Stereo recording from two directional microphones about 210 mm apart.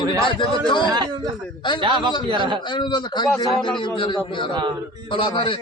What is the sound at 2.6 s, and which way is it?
A man's voice, 20° left (ahead or behind).